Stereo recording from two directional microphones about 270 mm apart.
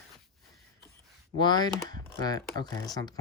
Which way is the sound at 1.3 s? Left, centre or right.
Centre.